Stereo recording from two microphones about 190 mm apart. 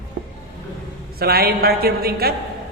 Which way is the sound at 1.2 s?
55° right (ahead or behind).